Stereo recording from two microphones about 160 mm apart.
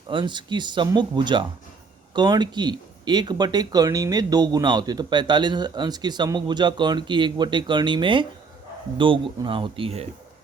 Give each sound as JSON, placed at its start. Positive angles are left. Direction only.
{"t": 0.1, "sound": "speech", "side_deg": -30}